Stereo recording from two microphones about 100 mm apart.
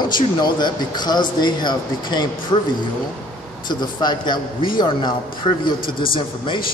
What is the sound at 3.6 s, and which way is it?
A man's voice, 50° left (ahead or behind).